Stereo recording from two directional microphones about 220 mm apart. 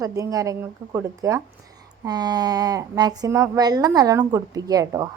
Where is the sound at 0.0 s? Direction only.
15° right (ahead or behind).